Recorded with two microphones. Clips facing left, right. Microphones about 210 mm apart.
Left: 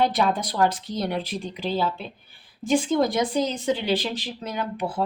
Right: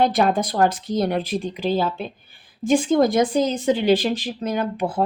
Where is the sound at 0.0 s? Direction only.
50° right (ahead or behind).